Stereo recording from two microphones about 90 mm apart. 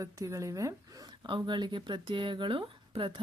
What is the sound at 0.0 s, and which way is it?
Speech, 35° right (ahead or behind).